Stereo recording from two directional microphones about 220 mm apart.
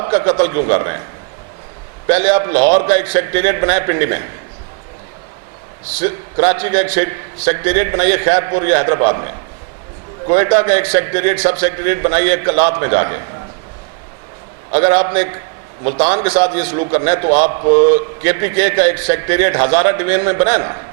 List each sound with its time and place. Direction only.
0.1 s a man's voice: 15° right (ahead or behind)
2.0 s a man's voice: 10° right (ahead or behind)
6.3 s a man's voice: 15° right (ahead or behind)
10.3 s a man's voice: 15° right (ahead or behind)
14.7 s a man's voice: 15° right (ahead or behind)
17.6 s a man's voice: 35° right (ahead or behind)
18.2 s a man's voice: 15° right (ahead or behind)